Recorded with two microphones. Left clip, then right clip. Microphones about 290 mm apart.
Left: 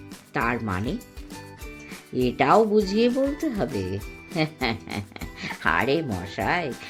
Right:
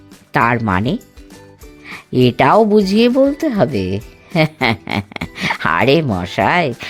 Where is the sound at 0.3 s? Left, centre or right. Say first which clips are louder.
Right 12 dB; right.